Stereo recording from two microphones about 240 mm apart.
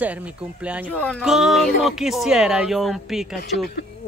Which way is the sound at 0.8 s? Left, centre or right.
Centre.